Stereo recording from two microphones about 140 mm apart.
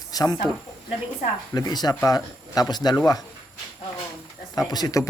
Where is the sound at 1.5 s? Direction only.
30° left (ahead or behind).